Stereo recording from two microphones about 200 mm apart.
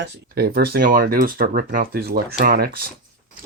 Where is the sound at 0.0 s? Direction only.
55° right (ahead or behind).